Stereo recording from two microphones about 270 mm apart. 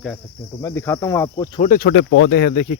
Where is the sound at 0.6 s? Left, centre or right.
Centre.